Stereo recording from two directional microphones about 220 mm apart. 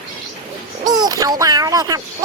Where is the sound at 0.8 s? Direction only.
15° right (ahead or behind).